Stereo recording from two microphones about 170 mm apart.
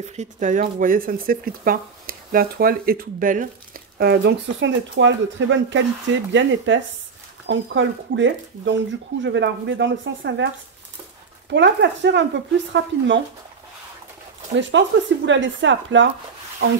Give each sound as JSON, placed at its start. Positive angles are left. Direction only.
{"t": 0.0, "sound": "speech", "side_deg": -40}
{"t": 11.5, "sound": "speech", "side_deg": -90}
{"t": 14.6, "sound": "speech", "side_deg": -90}